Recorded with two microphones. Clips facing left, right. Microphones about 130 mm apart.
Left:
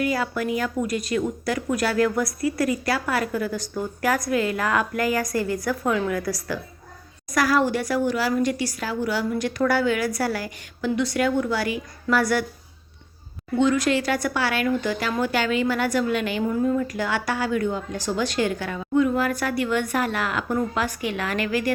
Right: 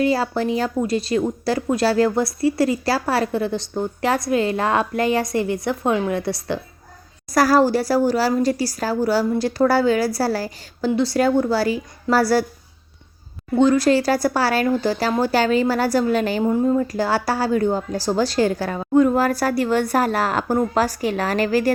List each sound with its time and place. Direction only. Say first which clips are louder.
0.0 s a woman's voice: right 5 dB; 30° right (ahead or behind)
13.6 s a woman's voice: right 5 dB; 35° right (ahead or behind)